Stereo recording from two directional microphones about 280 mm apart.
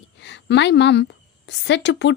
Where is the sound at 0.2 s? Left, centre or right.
Left.